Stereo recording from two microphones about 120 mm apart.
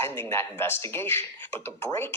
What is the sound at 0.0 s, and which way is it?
Speech, 20° left (ahead or behind).